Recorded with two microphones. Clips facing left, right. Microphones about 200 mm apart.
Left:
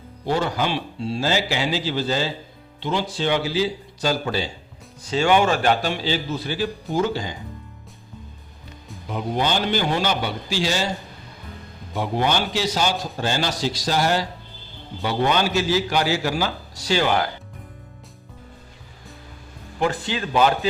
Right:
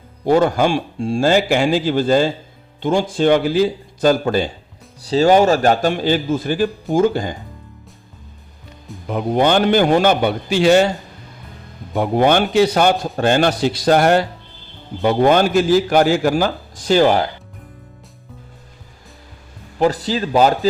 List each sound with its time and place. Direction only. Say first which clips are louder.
0.3 s a man's voice: right 8 dB; 50° right (ahead or behind)
5.0 s a man's voice: right 6 dB; 35° right (ahead or behind)
9.0 s a man's voice: right 8 dB; 55° right (ahead or behind)
11.9 s a man's voice: right 8 dB; 50° right (ahead or behind)
19.8 s speech: right 6 dB; 40° right (ahead or behind)